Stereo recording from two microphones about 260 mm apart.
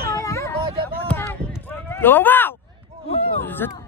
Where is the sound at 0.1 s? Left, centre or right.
Centre.